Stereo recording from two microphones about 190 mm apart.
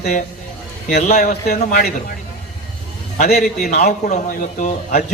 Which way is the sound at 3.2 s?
55° left (ahead or behind).